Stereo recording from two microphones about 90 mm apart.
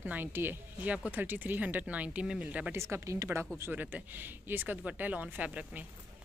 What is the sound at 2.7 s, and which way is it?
A woman's voice, 30° right (ahead or behind).